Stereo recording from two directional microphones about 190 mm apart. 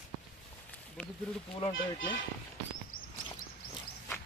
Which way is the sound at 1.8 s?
90° left.